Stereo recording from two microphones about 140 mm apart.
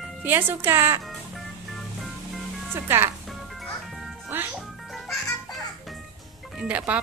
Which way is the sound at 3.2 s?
Centre (ahead or behind).